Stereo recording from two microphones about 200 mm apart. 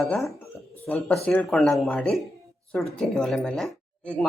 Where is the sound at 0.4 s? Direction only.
5° left (ahead or behind).